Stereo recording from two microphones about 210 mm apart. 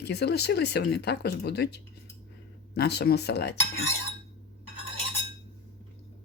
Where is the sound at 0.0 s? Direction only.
50° left (ahead or behind).